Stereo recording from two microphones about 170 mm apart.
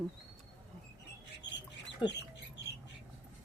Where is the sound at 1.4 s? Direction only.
90° left.